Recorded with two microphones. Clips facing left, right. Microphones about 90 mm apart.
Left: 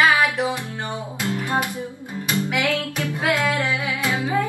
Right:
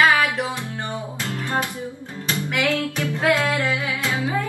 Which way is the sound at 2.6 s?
20° right (ahead or behind).